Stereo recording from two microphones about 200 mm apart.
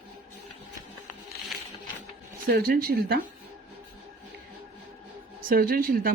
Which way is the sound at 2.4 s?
50° right (ahead or behind).